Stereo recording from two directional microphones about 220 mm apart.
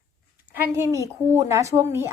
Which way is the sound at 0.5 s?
15° right (ahead or behind).